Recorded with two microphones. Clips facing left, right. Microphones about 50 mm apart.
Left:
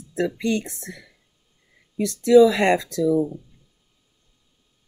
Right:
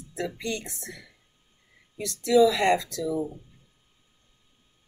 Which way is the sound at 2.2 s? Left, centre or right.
Left.